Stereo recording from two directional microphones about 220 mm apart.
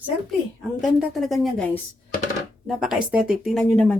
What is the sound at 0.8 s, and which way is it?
A woman's voice, centre (ahead or behind).